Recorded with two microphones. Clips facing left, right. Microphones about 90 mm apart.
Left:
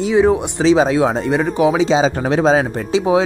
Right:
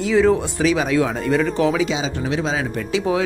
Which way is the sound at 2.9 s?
20° left (ahead or behind).